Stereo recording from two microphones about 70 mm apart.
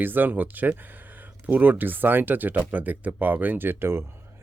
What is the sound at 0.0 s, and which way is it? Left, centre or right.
Speech, right.